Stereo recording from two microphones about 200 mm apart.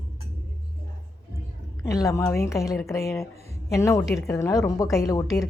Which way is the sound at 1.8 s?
15° left (ahead or behind).